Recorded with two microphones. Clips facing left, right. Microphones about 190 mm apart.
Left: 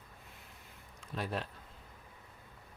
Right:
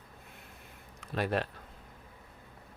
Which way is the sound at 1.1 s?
70° right (ahead or behind).